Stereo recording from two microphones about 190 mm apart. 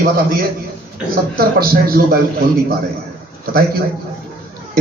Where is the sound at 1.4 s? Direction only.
50° right (ahead or behind).